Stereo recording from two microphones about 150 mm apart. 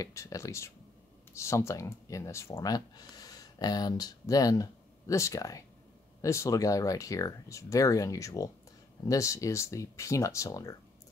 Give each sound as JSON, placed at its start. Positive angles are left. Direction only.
{"t": 0.0, "sound": "speech", "side_deg": 20}